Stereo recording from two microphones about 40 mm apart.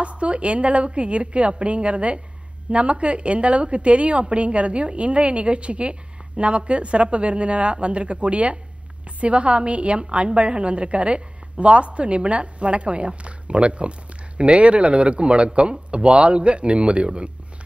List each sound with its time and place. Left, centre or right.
0.0 s a woman's voice: right